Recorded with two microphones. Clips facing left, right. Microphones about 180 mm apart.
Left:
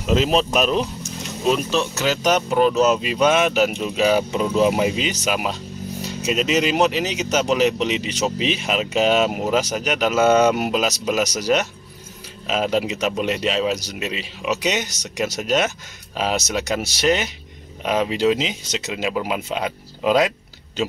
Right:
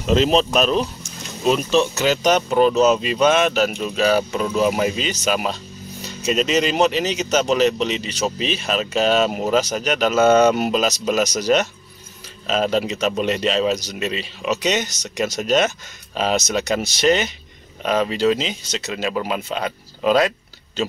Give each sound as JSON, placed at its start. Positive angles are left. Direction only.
{"t": 0.0, "sound": "speech", "side_deg": 5}
{"t": 1.4, "sound": "speech", "side_deg": 0}